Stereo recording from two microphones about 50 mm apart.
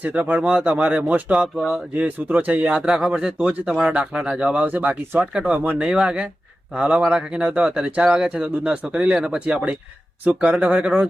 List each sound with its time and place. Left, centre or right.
0.0 s speech: right
2.6 s speech: centre
3.3 s speech: right
3.7 s speech: centre
3.9 s speech: right
5.4 s speech: right
5.8 s speech: centre
7.6 s speech: centre
7.9 s speech: right